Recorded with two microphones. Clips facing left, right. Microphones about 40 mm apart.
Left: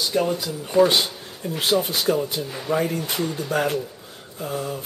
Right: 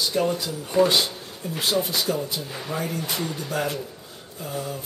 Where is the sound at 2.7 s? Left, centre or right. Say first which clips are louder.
Left 6 dB; left.